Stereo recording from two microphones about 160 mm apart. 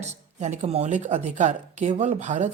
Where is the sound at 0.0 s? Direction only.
45° right (ahead or behind).